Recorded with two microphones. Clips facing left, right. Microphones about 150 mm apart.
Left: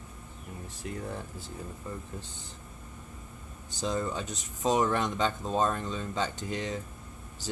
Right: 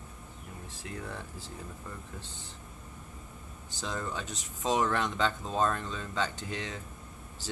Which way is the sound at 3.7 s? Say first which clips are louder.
Left 5 dB; 15° left (ahead or behind).